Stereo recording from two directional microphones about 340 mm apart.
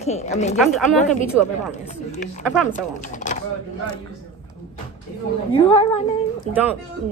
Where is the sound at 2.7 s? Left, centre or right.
Left.